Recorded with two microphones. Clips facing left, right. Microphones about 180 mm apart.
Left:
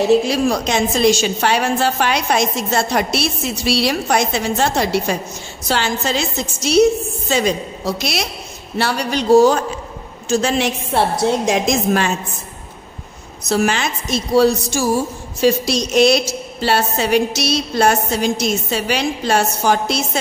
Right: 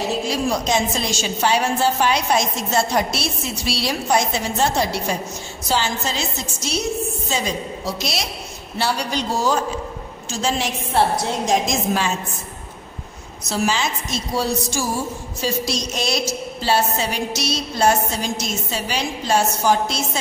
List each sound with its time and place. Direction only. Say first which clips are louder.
0.3 s a woman's voice: left 3 dB; 70° left (ahead or behind)
13.5 s a woman's voice: left 4 dB; 60° left (ahead or behind)